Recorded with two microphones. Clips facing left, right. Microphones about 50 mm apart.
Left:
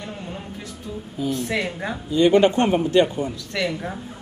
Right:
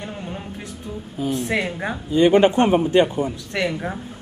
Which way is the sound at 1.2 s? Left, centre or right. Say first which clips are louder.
Right 2 dB; right.